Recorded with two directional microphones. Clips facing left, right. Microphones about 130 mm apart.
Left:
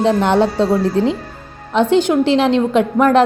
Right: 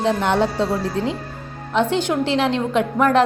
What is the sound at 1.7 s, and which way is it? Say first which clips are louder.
A woman's voice: left 6 dB; 20° left (ahead or behind).